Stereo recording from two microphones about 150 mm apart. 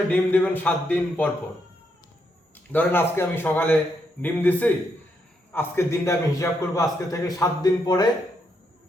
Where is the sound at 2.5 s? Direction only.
10° left (ahead or behind).